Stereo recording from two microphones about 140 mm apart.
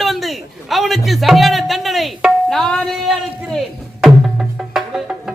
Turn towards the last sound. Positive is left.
turn(degrees=-5)  # may be behind; listen again after turning